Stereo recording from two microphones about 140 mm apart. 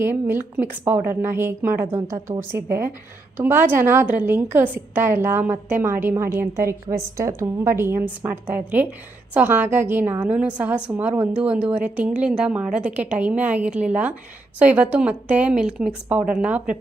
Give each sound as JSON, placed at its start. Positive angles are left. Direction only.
{"t": 0.0, "sound": "a woman's voice", "side_deg": -15}